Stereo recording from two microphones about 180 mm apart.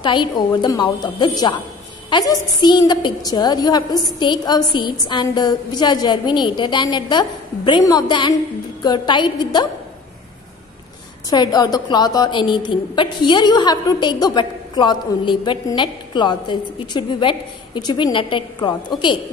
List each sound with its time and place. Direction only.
0.0 s a woman's voice: 25° left (ahead or behind)
11.2 s a woman's voice: 20° left (ahead or behind)